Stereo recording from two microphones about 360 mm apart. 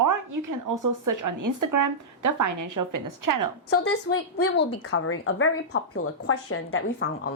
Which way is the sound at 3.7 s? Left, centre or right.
Left.